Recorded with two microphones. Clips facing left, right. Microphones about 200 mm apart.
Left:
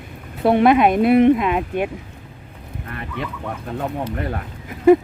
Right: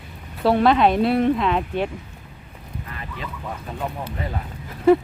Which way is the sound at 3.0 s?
65° left (ahead or behind).